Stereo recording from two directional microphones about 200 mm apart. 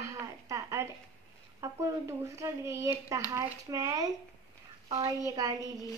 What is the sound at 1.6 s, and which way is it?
A child's voice, 15° right (ahead or behind).